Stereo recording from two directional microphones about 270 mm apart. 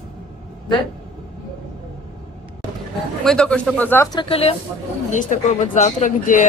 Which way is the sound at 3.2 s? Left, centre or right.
Centre.